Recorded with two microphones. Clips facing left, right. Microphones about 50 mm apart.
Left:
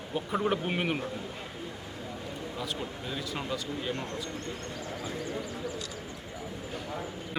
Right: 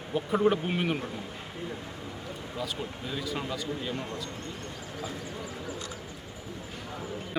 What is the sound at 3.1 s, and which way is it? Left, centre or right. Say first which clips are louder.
Speech: right 2 dB; centre.